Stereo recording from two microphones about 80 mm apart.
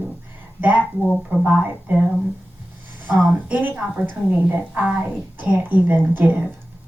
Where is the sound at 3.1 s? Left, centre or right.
Centre.